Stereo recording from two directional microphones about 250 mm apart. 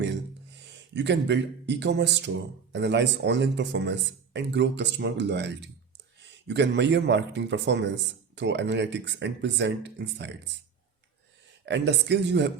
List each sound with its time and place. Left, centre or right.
0.9 s speech: right
11.6 s speech: right